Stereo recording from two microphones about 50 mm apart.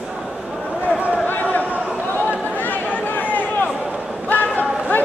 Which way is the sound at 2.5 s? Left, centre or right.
Left.